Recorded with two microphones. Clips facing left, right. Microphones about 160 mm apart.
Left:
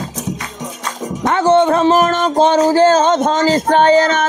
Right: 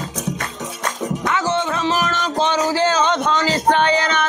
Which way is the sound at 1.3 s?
55° left (ahead or behind).